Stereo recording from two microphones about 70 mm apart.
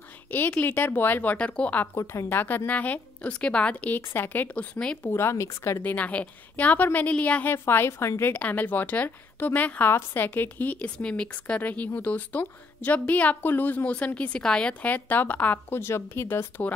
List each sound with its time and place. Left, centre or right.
0.3 s a woman's voice: left
2.0 s a woman's voice: left
2.3 s a woman's voice: left
5.1 s speech: left
5.8 s a woman's voice: left
7.5 s a woman's voice: left